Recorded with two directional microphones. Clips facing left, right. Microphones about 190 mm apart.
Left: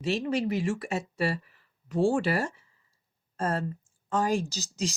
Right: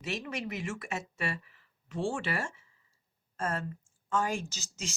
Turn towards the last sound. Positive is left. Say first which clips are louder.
# left 10 dB
turn(degrees=35)  # may be behind; listen again after turning